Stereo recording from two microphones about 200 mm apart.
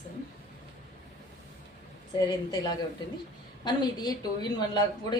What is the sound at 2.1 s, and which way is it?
A woman's voice, 20° left (ahead or behind).